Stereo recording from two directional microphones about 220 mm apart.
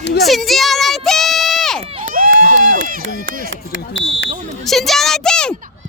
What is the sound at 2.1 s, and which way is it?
Run, 40° right (ahead or behind).